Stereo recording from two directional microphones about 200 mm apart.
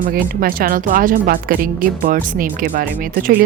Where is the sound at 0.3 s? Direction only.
45° right (ahead or behind).